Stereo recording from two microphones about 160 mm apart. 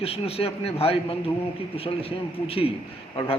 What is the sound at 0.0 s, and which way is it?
A man's voice, 35° left (ahead or behind).